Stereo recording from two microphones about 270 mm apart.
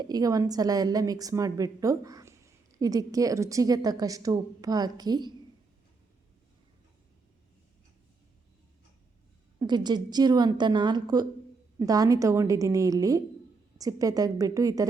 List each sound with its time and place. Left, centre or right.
0.0 s a woman's voice: centre
9.6 s a woman's voice: centre